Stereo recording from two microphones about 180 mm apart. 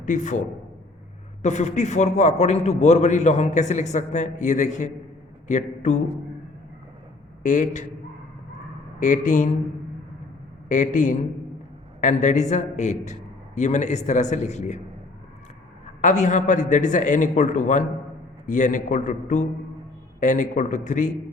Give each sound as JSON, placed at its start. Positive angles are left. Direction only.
{"t": 0.0, "sound": "a man's voice", "side_deg": 45}
{"t": 7.4, "sound": "a man's voice", "side_deg": 45}
{"t": 9.0, "sound": "a man's voice", "side_deg": 45}
{"t": 10.7, "sound": "a man's voice", "side_deg": 45}
{"t": 16.0, "sound": "a man's voice", "side_deg": 40}